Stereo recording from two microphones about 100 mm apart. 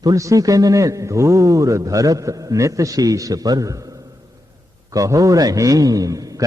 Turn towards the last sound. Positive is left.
turn(degrees=-35)  # may be behind; listen again after turning